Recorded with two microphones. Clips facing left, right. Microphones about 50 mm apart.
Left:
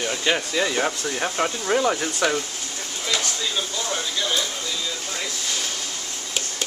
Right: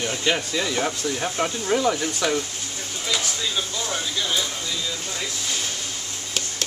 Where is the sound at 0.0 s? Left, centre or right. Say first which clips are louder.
Left 1 dB; centre.